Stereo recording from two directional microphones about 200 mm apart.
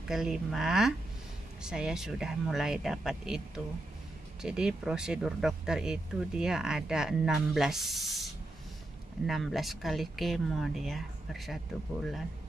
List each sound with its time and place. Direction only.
0.1 s speech: centre (ahead or behind)